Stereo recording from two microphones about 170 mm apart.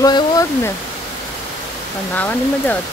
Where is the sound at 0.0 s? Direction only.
20° left (ahead or behind).